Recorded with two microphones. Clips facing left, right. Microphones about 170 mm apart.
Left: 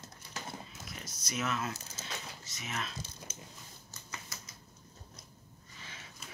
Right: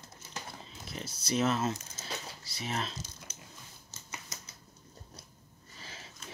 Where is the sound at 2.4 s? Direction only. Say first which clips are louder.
Right 5 dB; 35° right (ahead or behind).